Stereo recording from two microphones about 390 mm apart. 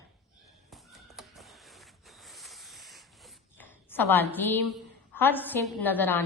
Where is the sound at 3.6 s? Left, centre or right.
Centre.